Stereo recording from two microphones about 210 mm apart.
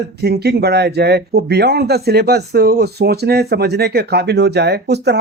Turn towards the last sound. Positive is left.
turn(degrees=-55)  # may be behind; listen again after turning